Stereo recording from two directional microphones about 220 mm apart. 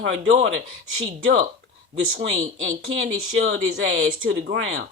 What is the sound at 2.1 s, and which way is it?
Speech, 60° right (ahead or behind).